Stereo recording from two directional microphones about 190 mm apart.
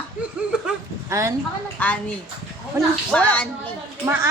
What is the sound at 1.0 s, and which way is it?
Speech, 15° right (ahead or behind).